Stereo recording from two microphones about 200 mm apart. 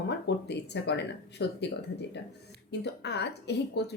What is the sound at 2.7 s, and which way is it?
A woman's voice, 55° left (ahead or behind).